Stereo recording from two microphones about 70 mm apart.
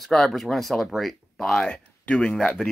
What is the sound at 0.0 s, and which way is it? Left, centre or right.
Speech, centre.